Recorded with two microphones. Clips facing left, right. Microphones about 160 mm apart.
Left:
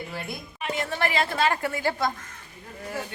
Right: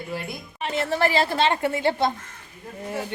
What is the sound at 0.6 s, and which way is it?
A woman's voice, 30° right (ahead or behind).